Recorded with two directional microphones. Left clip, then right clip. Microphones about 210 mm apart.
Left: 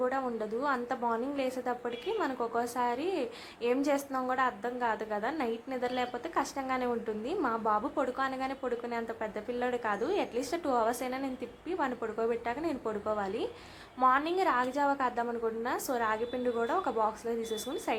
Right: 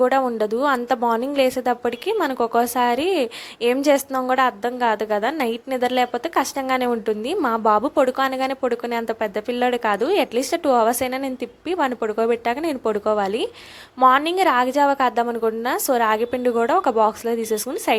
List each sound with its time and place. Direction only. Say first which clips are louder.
0.0 s a woman's voice: right 14 dB; 40° right (ahead or behind)